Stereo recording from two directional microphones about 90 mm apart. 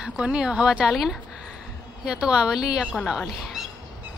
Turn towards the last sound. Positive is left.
turn(degrees=-5)  # may be behind; listen again after turning